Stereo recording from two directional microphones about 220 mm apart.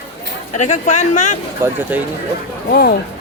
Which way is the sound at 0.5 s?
35° left (ahead or behind).